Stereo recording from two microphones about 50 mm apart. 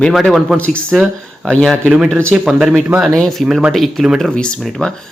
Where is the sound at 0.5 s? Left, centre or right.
Left.